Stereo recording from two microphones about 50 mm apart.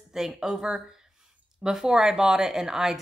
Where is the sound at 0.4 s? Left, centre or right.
Centre.